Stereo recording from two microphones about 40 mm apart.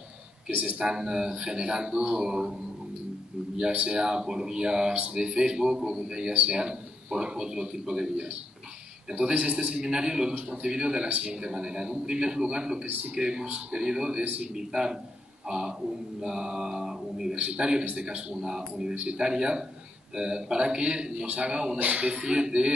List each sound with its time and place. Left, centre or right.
0.5 s speech: right
0.7 s a man's voice: centre
3.7 s a man's voice: right
9.5 s a man's voice: right
11.1 s speech: right
11.4 s a man's voice: centre
17.4 s a man's voice: right